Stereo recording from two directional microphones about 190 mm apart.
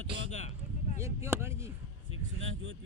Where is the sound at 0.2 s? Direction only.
90° right.